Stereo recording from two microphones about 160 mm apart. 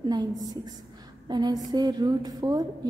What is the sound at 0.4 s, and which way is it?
A woman's voice, 25° right (ahead or behind).